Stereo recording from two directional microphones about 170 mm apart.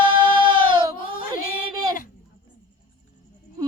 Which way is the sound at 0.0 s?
30° right (ahead or behind).